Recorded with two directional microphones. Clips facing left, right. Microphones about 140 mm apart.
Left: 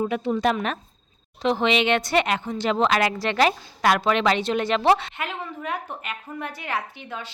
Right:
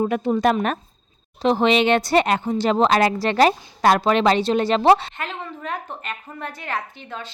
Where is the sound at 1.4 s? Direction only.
35° right (ahead or behind).